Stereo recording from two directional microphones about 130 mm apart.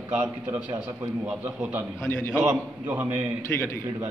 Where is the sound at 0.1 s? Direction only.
15° right (ahead or behind).